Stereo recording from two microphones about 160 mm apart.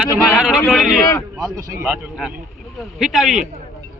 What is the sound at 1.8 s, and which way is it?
Speech, 5° right (ahead or behind).